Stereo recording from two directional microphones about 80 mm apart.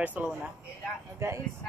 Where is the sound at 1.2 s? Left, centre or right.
Right.